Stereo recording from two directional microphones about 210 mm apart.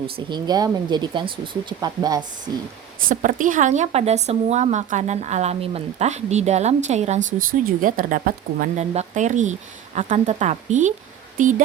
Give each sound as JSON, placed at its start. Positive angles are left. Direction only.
{"t": 0.3, "sound": "speech", "side_deg": -20}
{"t": 3.1, "sound": "speech", "side_deg": -40}